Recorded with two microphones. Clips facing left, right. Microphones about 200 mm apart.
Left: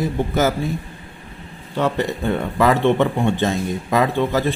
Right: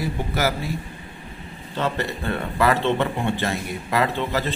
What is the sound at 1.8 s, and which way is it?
A man's voice, 15° left (ahead or behind).